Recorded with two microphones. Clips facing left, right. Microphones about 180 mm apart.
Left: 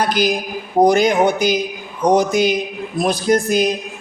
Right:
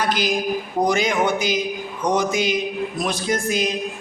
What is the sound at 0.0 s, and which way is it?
A woman's voice, 40° left (ahead or behind).